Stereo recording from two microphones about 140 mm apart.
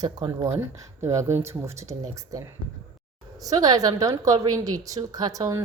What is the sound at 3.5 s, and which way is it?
A woman's voice, 25° right (ahead or behind).